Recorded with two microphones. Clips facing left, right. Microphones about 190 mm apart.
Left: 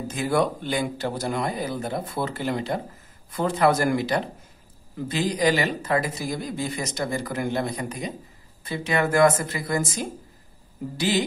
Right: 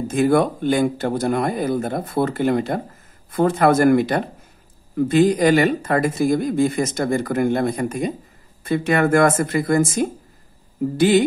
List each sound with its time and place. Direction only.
0.1 s speech: 50° right (ahead or behind)